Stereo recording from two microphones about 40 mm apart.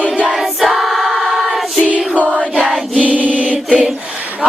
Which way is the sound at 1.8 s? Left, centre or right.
Right.